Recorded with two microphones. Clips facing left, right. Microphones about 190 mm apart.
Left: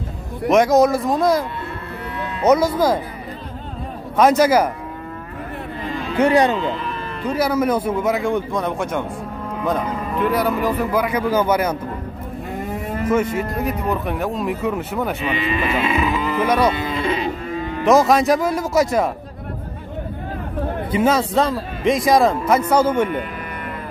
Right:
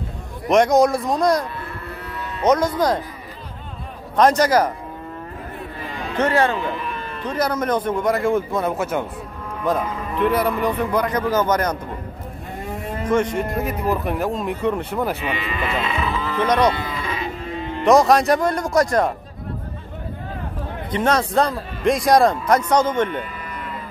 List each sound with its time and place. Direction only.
0.5 s speech: centre (ahead or behind)
2.4 s a man's voice: 10° left (ahead or behind)
4.2 s speech: 5° left (ahead or behind)
6.1 s a man's voice: 15° left (ahead or behind)
7.2 s speech: 5° left (ahead or behind)
12.6 s livestock: centre (ahead or behind)
13.6 s speech: centre (ahead or behind)
15.3 s moo: 15° left (ahead or behind)
16.7 s cattle: 25° left (ahead or behind)
17.8 s speech: centre (ahead or behind)
20.9 s a man's voice: 5° left (ahead or behind)